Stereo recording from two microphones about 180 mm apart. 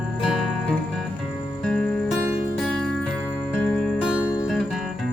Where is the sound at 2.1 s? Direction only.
10° right (ahead or behind).